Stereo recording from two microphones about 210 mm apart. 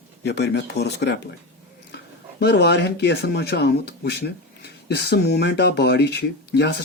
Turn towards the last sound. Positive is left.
turn(degrees=55)  # may be behind; listen again after turning